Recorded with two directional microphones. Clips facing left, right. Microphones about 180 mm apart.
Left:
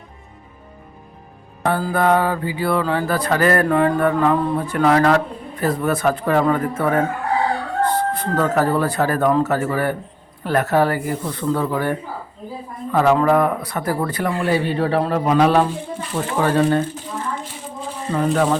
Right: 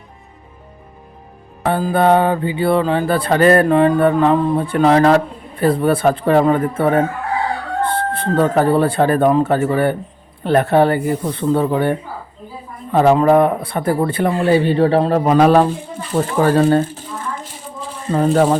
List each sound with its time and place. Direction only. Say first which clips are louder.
1.7 s mantra: right 4 dB; 25° right (ahead or behind)
15.3 s speech: right 4 dB; 45° right (ahead or behind)
18.1 s speech: right 4 dB; 35° right (ahead or behind)